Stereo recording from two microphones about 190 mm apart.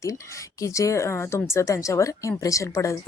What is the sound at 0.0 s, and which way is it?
Speech, 15° left (ahead or behind).